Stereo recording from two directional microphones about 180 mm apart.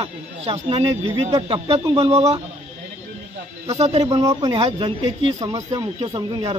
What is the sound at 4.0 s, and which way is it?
Speech, 20° right (ahead or behind).